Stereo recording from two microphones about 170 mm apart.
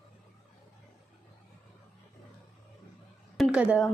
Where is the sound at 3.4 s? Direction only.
5° right (ahead or behind).